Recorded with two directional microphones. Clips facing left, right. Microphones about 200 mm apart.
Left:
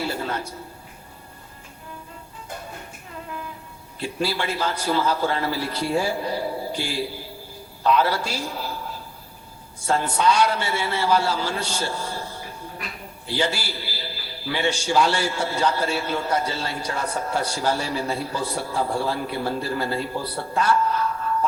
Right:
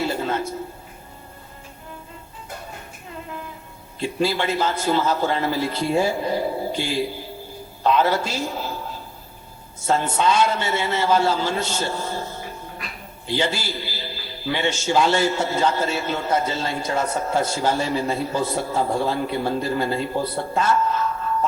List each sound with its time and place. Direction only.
0.0 s a sound: 20° right (ahead or behind)
4.2 s a man's voice: 20° right (ahead or behind)
9.8 s a man's voice: 25° right (ahead or behind)
13.7 s music: 20° right (ahead or behind)
14.8 s a man's voice: 20° right (ahead or behind)